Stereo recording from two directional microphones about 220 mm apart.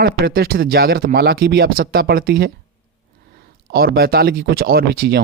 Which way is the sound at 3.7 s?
45° right (ahead or behind).